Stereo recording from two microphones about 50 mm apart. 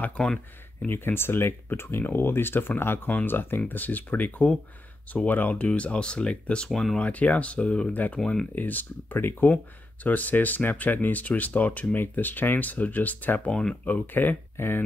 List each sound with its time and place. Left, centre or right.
0.2 s speech: centre
0.8 s speech: left
6.7 s speech: centre
7.0 s speech: left
7.9 s speech: left
8.2 s speech: centre
8.5 s speech: left
13.5 s speech: centre
13.8 s speech: left
14.6 s speech: left